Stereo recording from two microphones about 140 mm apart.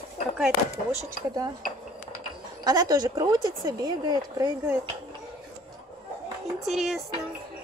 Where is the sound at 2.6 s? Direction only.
25° right (ahead or behind).